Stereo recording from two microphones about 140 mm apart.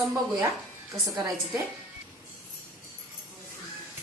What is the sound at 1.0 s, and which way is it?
Speech, 25° right (ahead or behind).